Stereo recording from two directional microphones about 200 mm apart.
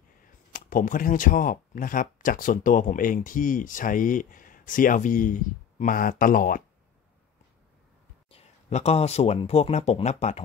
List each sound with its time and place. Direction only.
0.5 s speech: 45° left (ahead or behind)
8.3 s speech: 30° left (ahead or behind)